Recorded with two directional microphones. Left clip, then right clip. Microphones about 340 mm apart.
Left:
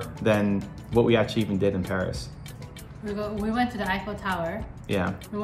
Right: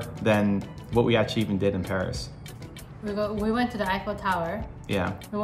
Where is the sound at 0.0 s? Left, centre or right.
Centre.